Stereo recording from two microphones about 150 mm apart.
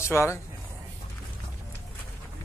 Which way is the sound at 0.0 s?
20° left (ahead or behind).